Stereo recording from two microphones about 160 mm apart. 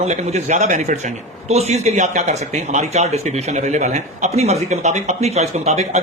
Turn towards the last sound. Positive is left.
turn(degrees=-45)  # may be behind; listen again after turning